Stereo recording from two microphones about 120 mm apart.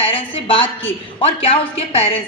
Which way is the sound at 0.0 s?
50° left (ahead or behind).